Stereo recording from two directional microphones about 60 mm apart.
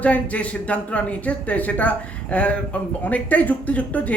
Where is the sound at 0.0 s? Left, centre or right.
Left.